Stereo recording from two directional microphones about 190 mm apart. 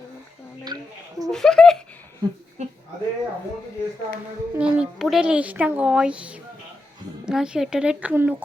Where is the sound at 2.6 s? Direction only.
35° right (ahead or behind).